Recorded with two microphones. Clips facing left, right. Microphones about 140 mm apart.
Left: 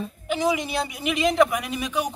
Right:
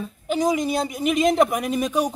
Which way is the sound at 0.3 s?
40° right (ahead or behind).